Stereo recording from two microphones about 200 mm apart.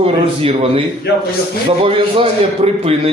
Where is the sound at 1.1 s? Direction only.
60° left (ahead or behind).